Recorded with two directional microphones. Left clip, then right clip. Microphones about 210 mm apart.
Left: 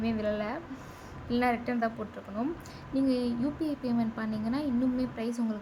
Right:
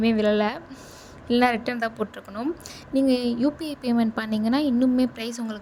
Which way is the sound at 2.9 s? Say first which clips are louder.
Right 7 dB; 35° right (ahead or behind).